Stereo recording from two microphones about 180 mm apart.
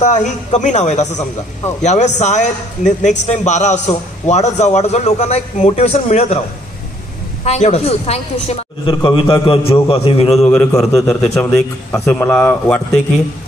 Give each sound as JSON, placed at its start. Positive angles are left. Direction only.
{"t": 0.0, "sound": "a man's voice", "side_deg": 40}
{"t": 7.4, "sound": "a man's voice", "side_deg": 35}
{"t": 10.4, "sound": "a man's voice", "side_deg": 10}